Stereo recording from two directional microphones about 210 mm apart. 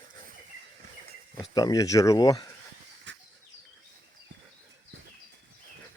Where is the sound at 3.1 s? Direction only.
60° right (ahead or behind).